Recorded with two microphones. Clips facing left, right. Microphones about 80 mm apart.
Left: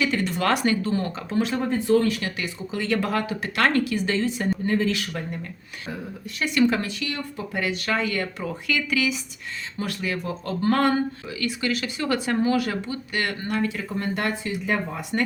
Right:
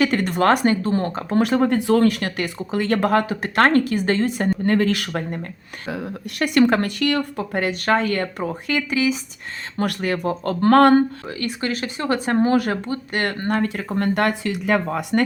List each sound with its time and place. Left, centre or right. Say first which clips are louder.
0.0 s speech: right 5 dB; right
5.9 s speech: right 6 dB; right
7.6 s speech: right 5 dB; right
8.4 s speech: right 3 dB; right
9.7 s speech: right 6 dB; right
11.3 s speech: right 1 dB; right